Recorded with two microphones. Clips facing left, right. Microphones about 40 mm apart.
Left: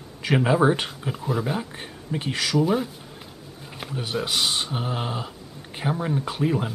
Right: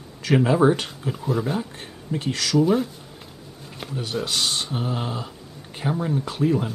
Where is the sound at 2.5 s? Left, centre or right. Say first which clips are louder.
Right 3 dB; centre.